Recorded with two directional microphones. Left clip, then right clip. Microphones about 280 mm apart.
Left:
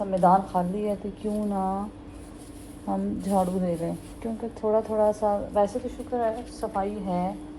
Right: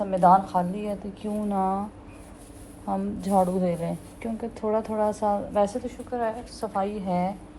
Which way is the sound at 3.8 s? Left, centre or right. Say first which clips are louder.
Even; right.